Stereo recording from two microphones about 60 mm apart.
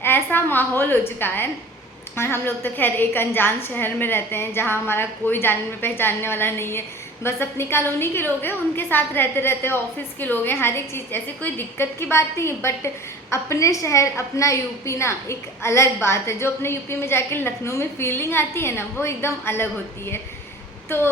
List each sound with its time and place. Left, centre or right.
0.0 s a woman's voice: left